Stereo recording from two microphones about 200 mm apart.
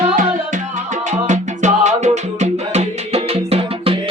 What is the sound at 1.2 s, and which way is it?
Music, 35° right (ahead or behind).